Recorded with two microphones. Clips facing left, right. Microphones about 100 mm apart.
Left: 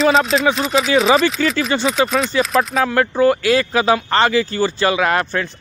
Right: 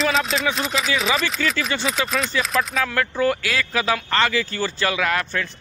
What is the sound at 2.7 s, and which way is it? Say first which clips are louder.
A man's voice: left 6 dB; 30° left (ahead or behind).